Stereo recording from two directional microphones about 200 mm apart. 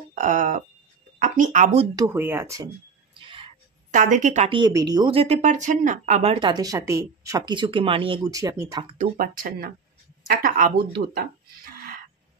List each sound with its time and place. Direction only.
0.1 s speech: 40° right (ahead or behind)
2.0 s speech: 10° right (ahead or behind)
3.2 s whispering: 25° right (ahead or behind)
3.9 s speech: 40° right (ahead or behind)
4.5 s speech: 20° right (ahead or behind)
8.9 s speech: 40° right (ahead or behind)